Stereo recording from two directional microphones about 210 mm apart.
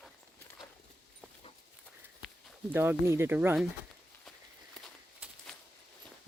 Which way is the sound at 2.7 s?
10° right (ahead or behind).